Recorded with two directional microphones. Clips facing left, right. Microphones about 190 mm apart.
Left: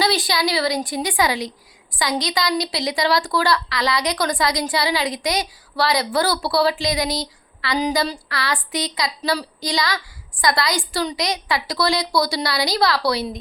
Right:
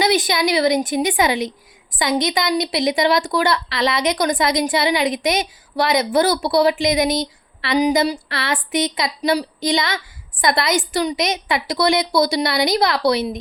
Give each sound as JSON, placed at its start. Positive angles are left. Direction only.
{"t": 0.0, "sound": "a woman's voice", "side_deg": -20}